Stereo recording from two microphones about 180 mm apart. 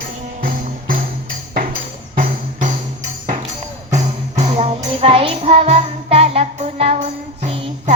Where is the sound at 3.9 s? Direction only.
40° right (ahead or behind).